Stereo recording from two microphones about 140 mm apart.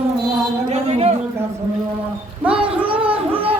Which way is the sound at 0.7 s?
50° right (ahead or behind).